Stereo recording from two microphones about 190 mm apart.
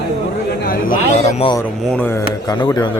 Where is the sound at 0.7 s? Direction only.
45° left (ahead or behind).